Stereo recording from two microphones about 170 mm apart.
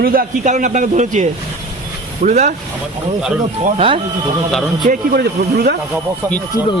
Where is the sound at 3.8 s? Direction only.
35° right (ahead or behind).